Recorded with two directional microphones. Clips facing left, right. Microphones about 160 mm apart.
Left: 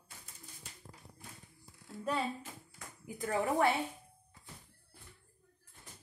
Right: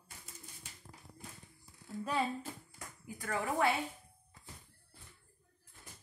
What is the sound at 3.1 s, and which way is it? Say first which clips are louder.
Speech: left 3 dB; 20° left (ahead or behind).